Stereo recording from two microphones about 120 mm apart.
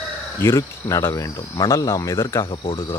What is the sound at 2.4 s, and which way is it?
Speech, 45° left (ahead or behind).